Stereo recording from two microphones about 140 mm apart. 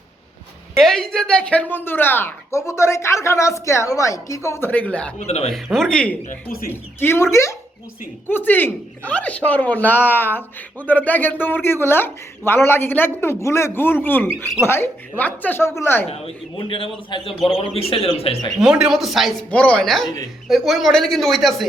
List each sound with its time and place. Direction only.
0.8 s speech: 5° left (ahead or behind)
5.2 s speech: 50° left (ahead or behind)
5.7 s speech: 5° left (ahead or behind)
16.0 s a man's voice: 45° left (ahead or behind)
18.6 s speech: 5° right (ahead or behind)
19.5 s speech: 10° left (ahead or behind)